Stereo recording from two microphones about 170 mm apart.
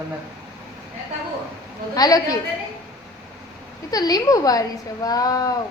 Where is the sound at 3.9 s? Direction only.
20° left (ahead or behind).